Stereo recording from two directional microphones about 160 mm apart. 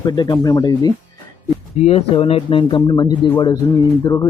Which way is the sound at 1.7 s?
40° left (ahead or behind).